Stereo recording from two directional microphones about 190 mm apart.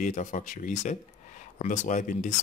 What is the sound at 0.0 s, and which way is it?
Speech, 40° left (ahead or behind).